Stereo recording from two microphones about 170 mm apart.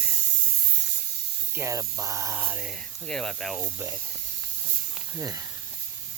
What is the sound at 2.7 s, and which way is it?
Speech, 5° left (ahead or behind).